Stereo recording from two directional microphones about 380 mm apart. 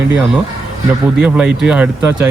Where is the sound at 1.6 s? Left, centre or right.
Centre.